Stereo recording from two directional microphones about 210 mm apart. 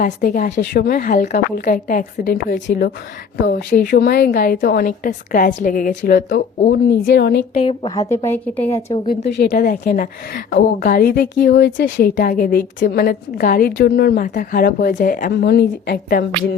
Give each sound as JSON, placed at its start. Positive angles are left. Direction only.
{"t": 0.0, "sound": "a woman's voice", "side_deg": 45}
{"t": 7.5, "sound": "a woman's voice", "side_deg": 25}
{"t": 9.0, "sound": "a woman's voice", "side_deg": 50}
{"t": 12.1, "sound": "a woman's voice", "side_deg": 40}